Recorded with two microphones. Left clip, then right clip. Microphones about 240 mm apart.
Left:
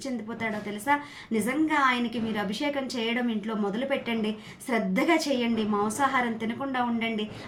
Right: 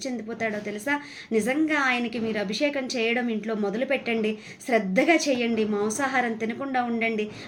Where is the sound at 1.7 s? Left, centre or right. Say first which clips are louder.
Even; left.